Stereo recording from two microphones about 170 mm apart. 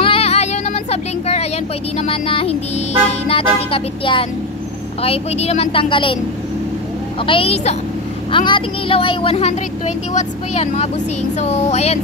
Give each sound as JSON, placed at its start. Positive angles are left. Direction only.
{"t": 0.0, "sound": "a sound", "side_deg": 35}
{"t": 2.0, "sound": "a woman's voice", "side_deg": 35}
{"t": 7.2, "sound": "a woman's voice", "side_deg": 30}